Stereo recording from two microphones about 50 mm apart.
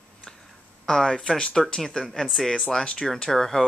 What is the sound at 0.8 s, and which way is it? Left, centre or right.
Speech, centre.